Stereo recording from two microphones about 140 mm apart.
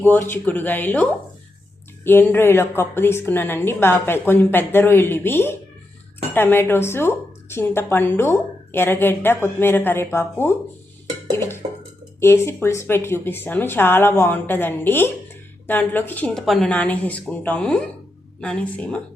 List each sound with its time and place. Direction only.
0.1 s a woman's voice: 15° left (ahead or behind)
2.0 s a woman's voice: 15° left (ahead or behind)